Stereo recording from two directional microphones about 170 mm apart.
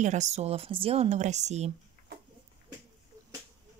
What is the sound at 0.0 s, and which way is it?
Speech, 45° right (ahead or behind).